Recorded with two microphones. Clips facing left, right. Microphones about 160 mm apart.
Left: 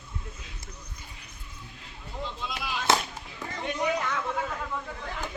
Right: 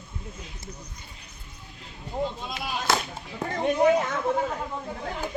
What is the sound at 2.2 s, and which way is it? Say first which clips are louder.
Speech: right 5 dB; 40° right (ahead or behind).